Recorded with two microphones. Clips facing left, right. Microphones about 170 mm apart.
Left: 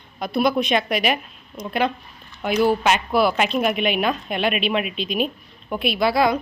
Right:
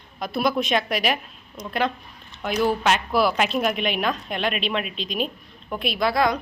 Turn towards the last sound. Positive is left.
turn(degrees=5)  # may be behind; listen again after turning